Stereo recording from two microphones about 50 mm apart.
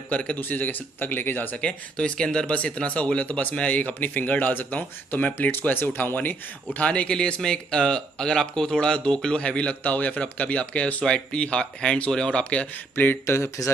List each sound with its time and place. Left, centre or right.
0.1 s speech: left
0.4 s speech: left
1.6 s speech: centre; by 6.1 s left
6.1 s speech: left
6.9 s speech: centre
12.9 s speech: left